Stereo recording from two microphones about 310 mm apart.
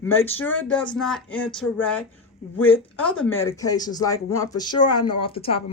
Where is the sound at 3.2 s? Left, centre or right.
Centre.